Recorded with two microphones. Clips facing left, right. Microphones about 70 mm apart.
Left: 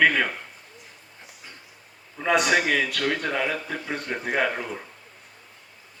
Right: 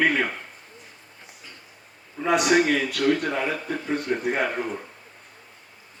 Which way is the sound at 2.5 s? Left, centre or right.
Left.